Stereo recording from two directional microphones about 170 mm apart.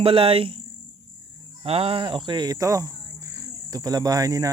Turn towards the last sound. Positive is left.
turn(degrees=-20)  # may be behind; listen again after turning